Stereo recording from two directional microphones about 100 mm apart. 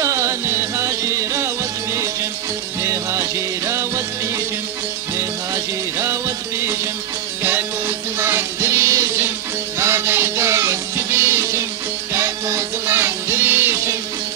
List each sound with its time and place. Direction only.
0.0 s music: 30° right (ahead or behind)
2.8 s music: 30° right (ahead or behind)
5.9 s music: 25° right (ahead or behind)
8.2 s music: 25° right (ahead or behind)